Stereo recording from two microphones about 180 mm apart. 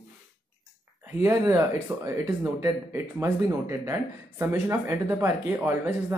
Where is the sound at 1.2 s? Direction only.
15° right (ahead or behind).